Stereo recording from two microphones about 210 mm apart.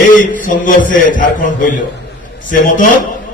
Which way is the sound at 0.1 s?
40° left (ahead or behind).